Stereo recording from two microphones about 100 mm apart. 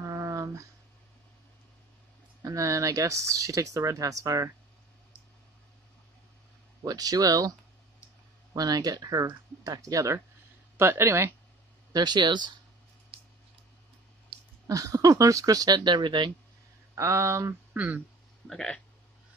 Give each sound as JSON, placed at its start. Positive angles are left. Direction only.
{"t": 0.0, "sound": "a sound", "side_deg": -30}
{"t": 2.4, "sound": "speech", "side_deg": -35}
{"t": 6.8, "sound": "speech", "side_deg": -40}
{"t": 8.5, "sound": "speech", "side_deg": -40}
{"t": 11.9, "sound": "speech", "side_deg": -45}
{"t": 14.3, "sound": "a sound", "side_deg": -65}
{"t": 14.7, "sound": "speech", "side_deg": -35}
{"t": 16.9, "sound": "speech", "side_deg": -30}
{"t": 17.7, "sound": "speech", "side_deg": -15}
{"t": 18.5, "sound": "speech", "side_deg": 5}